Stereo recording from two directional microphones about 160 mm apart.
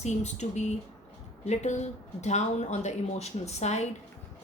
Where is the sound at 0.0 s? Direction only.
45° left (ahead or behind).